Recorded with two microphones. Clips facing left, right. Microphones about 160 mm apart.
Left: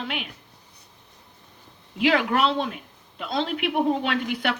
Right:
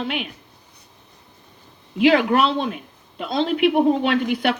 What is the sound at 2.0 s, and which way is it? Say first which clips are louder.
A woman's voice: right 5 dB; 75° right (ahead or behind).